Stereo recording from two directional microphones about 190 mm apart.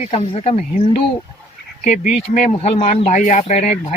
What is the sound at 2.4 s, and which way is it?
Speech, 35° left (ahead or behind).